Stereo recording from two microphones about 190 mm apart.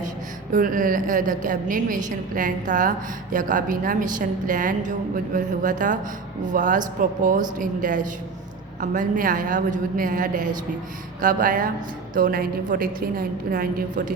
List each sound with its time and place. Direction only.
0.5 s a woman's voice: 45° right (ahead or behind)